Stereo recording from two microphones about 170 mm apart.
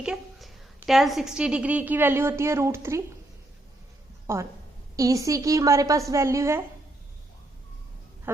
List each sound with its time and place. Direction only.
0.0 s a woman's voice: centre (ahead or behind)
4.3 s a woman's voice: 15° right (ahead or behind)